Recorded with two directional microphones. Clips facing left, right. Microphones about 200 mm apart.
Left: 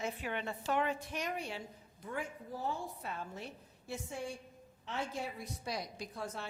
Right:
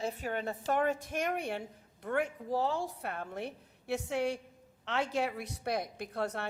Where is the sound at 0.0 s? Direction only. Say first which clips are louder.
Right 4 dB; 40° right (ahead or behind).